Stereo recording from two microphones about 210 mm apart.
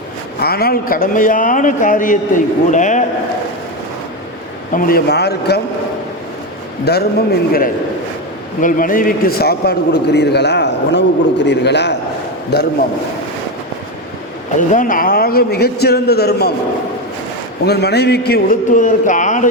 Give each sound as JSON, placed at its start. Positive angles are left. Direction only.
{"t": 0.4, "sound": "a man's voice", "side_deg": 45}
{"t": 4.7, "sound": "a man's voice", "side_deg": 40}
{"t": 6.9, "sound": "a man's voice", "side_deg": 50}
{"t": 8.6, "sound": "a man's voice", "side_deg": 40}
{"t": 14.5, "sound": "a man's voice", "side_deg": 35}
{"t": 17.7, "sound": "a man's voice", "side_deg": 50}